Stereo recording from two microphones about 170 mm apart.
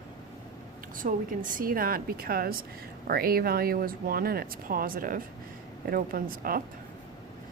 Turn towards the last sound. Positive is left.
turn(degrees=-60)  # may be behind; listen again after turning